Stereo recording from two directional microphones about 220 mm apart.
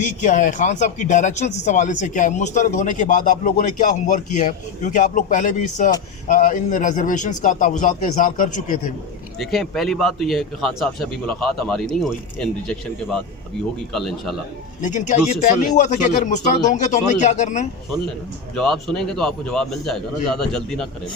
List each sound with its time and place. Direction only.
0.0 s speech: 35° left (ahead or behind)
9.4 s a man's voice: centre (ahead or behind)
14.8 s speech: 35° left (ahead or behind)
18.5 s a man's voice: centre (ahead or behind)